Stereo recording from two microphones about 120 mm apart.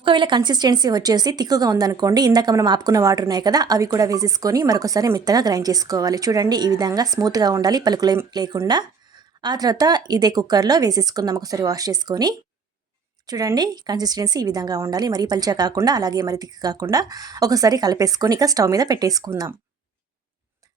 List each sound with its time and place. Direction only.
0.0 s a woman's voice: 40° right (ahead or behind)